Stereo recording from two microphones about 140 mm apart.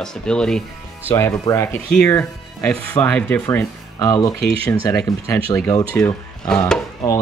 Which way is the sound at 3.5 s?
25° left (ahead or behind).